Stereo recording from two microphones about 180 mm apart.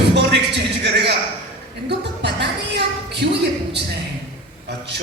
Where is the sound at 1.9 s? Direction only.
70° right (ahead or behind).